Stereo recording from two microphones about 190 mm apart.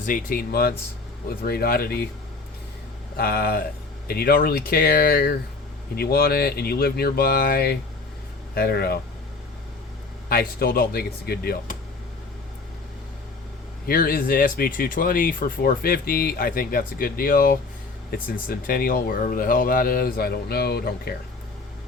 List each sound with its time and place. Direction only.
0.0 s speech: 45° left (ahead or behind)
3.2 s speech: 55° left (ahead or behind)
10.2 s speech: 50° left (ahead or behind)
13.8 s speech: 50° left (ahead or behind)